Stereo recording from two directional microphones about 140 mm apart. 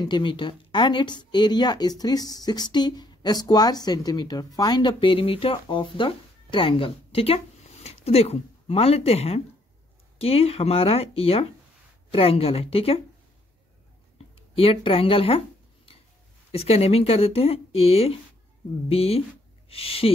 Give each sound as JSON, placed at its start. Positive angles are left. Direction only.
{"t": 0.0, "sound": "speech", "side_deg": 35}
{"t": 14.1, "sound": "a sound", "side_deg": 40}
{"t": 16.5, "sound": "speech", "side_deg": 45}